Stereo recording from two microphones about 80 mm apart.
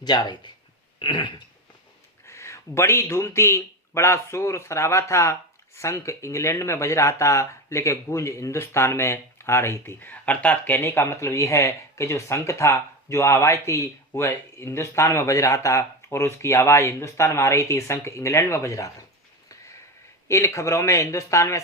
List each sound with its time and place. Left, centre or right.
0.0 s speech: left
0.9 s cough: left
2.2 s speech: left
9.8 s speech: left
10.8 s speech: left
20.2 s speech: left